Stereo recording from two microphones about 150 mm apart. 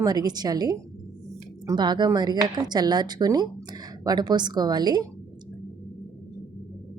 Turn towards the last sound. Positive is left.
turn(degrees=-30)  # may be behind; listen again after turning